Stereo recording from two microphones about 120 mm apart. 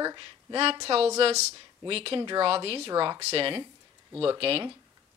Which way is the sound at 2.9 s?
30° right (ahead or behind).